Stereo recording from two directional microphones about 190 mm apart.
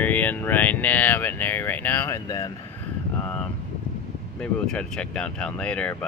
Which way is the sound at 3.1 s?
5° left (ahead or behind).